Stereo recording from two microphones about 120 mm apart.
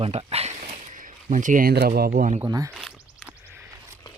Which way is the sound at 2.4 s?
25° right (ahead or behind).